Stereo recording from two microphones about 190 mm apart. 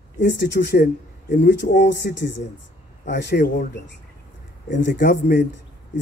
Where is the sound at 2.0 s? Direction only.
55° left (ahead or behind).